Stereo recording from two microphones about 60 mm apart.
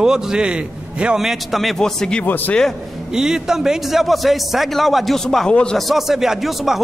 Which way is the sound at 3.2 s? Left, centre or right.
Centre.